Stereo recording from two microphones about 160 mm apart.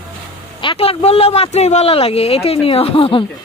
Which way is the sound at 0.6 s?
35° left (ahead or behind).